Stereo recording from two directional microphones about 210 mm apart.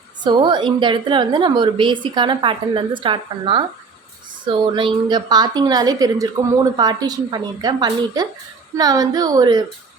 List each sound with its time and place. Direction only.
0.2 s a woman's voice: 20° right (ahead or behind)